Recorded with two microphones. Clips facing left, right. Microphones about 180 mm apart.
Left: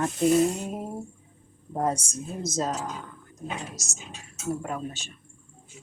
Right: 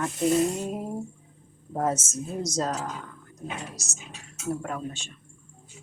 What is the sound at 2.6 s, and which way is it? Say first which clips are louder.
Speech: left 1 dB; 20° left (ahead or behind).